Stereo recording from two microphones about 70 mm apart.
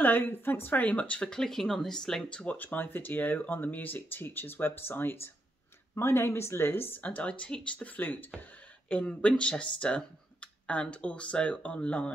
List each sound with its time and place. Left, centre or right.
0.0 s speech: left